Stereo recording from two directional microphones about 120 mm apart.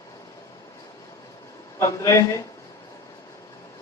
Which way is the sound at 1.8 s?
25° left (ahead or behind).